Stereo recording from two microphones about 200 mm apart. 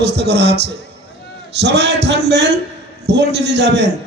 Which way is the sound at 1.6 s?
55° right (ahead or behind).